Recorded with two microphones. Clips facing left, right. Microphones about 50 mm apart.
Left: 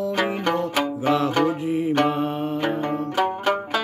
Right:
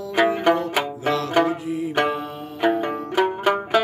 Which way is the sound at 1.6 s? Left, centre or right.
Left.